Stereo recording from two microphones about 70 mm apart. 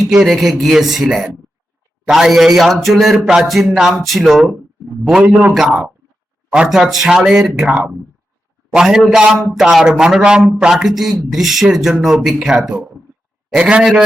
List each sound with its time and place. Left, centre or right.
0.1 s speech: centre
5.2 s a man's voice: right
5.5 s speech: centre